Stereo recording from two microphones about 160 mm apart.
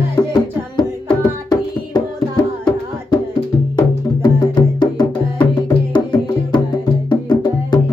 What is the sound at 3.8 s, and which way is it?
Music, 25° left (ahead or behind).